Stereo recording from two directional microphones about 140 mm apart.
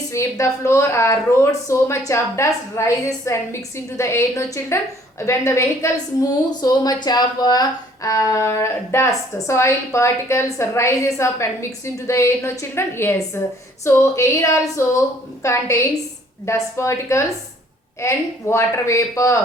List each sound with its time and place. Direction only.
0.1 s a woman's voice: 20° left (ahead or behind)